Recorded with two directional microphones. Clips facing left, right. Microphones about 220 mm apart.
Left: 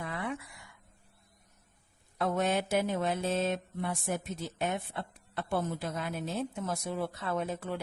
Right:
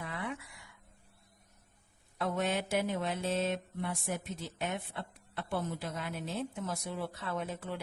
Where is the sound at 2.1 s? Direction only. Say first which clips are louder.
Left 3 dB; 45° left (ahead or behind).